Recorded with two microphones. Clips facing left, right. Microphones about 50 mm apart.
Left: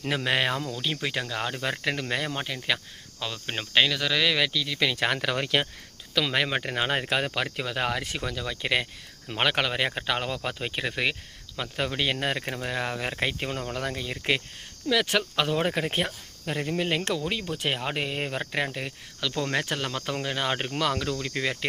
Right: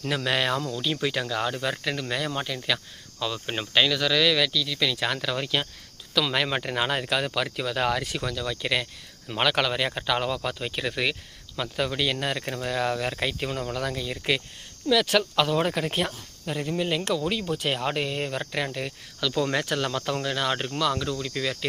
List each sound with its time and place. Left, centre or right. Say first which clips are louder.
0.0 s speech: even; left
1.6 s speech: even; left
3.3 s speech: right 2 dB; centre
3.8 s speech: right 1 dB; centre; by 4.9 s left
4.9 s speech: left 1 dB; left
6.1 s speech: right 1 dB; centre
6.9 s speech: even; left
7.4 s speech: right 3 dB; centre
12.5 s speech: right 3 dB; centre; by 17.0 s left
17.2 s speech: right 3 dB; centre
18.7 s speech: right 2 dB; centre
20.7 s speech: right 1 dB; left